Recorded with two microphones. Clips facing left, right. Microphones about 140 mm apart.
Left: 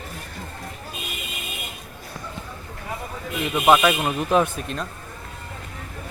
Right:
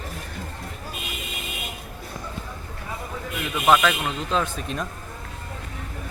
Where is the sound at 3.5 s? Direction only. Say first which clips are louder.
Left 2 dB; 15° left (ahead or behind).